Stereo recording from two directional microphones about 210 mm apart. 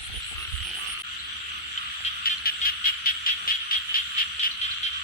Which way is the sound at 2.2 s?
45° left (ahead or behind).